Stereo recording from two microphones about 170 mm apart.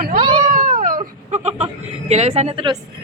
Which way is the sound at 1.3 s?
40° right (ahead or behind).